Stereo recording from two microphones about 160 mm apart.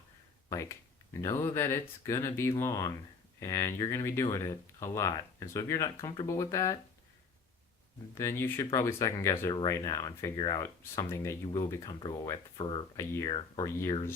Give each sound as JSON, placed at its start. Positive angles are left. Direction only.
{"t": 0.5, "sound": "speech", "side_deg": 20}
{"t": 8.2, "sound": "speech", "side_deg": 15}
{"t": 10.6, "sound": "speech", "side_deg": 15}